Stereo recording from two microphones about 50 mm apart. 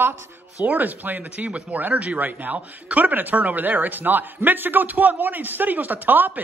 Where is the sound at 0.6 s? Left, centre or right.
Right.